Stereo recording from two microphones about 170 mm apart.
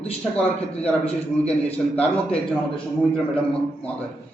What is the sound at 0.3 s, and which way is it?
A man's voice, 5° left (ahead or behind).